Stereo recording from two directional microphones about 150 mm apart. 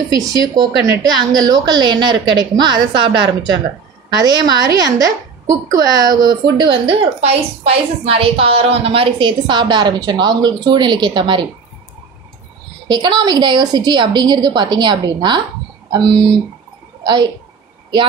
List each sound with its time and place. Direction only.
0.1 s a woman's voice: 25° right (ahead or behind)
12.8 s a woman's voice: 30° right (ahead or behind)